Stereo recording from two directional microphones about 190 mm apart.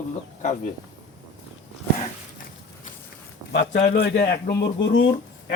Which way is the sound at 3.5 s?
70° left (ahead or behind).